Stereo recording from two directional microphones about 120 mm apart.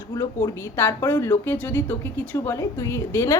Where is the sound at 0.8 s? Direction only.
20° left (ahead or behind).